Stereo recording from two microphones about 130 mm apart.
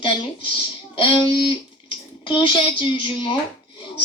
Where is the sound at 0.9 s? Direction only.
35° left (ahead or behind).